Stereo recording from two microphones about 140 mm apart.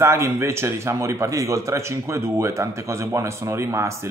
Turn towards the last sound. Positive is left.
turn(degrees=-20)  # may be behind; listen again after turning